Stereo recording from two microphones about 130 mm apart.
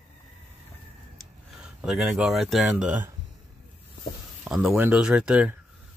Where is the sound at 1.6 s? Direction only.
5° right (ahead or behind).